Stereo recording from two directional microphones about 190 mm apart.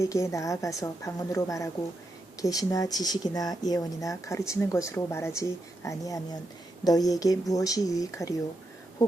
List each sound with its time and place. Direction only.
0.0 s a woman's voice: 15° left (ahead or behind)